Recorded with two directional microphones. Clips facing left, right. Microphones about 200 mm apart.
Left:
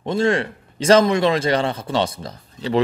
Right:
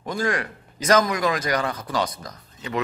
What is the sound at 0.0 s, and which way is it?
A man's voice, 25° left (ahead or behind).